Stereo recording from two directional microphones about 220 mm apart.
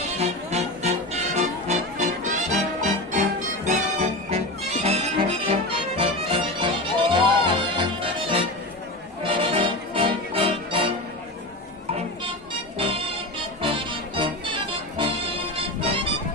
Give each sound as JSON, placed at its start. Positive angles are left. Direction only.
{"t": 0.2, "sound": "music", "side_deg": -30}
{"t": 12.7, "sound": "music", "side_deg": -25}
{"t": 14.2, "sound": "music", "side_deg": -20}